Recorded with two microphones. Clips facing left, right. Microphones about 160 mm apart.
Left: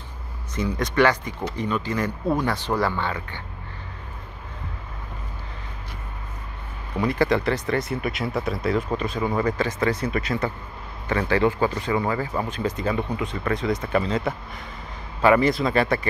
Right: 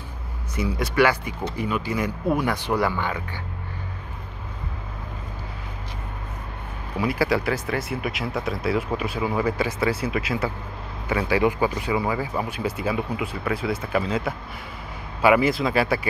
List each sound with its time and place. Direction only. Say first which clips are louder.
0.6 s speech: even; 10° right (ahead or behind)
7.0 s speech: left 1 dB; 5° right (ahead or behind)